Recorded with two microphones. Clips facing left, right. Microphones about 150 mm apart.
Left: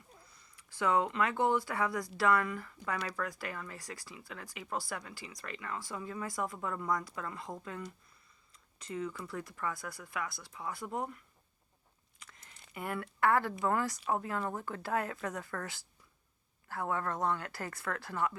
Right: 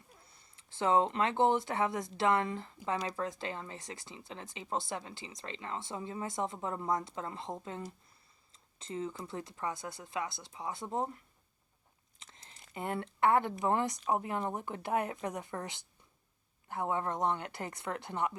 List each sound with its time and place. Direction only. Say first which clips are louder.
0.2 s speech: left 2 dB; 25° right (ahead or behind)
12.2 s a sound: even; 25° right (ahead or behind)
12.7 s speech: right 2 dB; 25° right (ahead or behind)